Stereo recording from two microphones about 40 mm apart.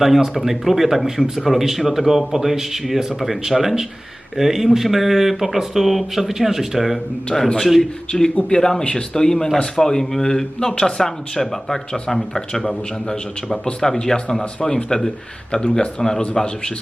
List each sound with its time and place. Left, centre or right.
0.0 s speech: centre
7.8 s speech: centre